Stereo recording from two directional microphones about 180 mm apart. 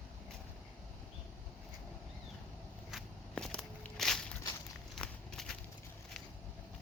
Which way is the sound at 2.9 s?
Centre (ahead or behind).